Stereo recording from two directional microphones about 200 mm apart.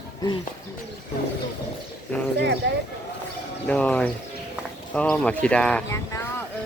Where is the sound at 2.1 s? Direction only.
10° left (ahead or behind).